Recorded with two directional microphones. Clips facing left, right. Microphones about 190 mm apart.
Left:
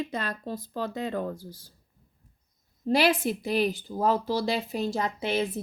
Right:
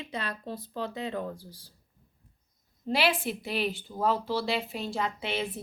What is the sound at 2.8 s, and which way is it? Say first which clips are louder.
Speech: left 4 dB; 45° left (ahead or behind).